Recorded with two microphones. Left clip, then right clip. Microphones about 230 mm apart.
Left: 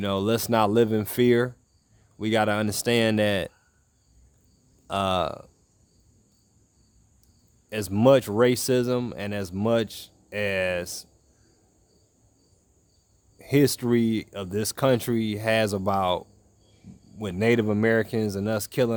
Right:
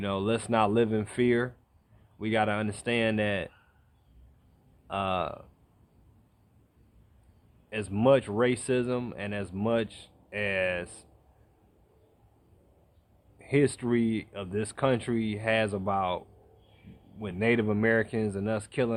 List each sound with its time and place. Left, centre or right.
0.0 s speech: left
4.9 s speech: left
7.7 s speech: left
13.4 s speech: left